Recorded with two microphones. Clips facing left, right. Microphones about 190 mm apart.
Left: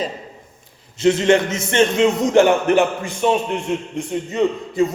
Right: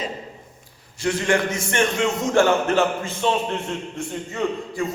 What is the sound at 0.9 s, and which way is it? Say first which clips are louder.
A man's voice: left 7 dB; 20° left (ahead or behind).